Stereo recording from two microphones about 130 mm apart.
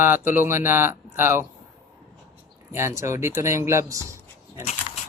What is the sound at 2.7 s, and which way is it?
Speech, 20° right (ahead or behind).